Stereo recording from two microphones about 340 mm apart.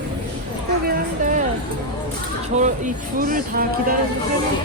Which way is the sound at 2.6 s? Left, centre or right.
Right.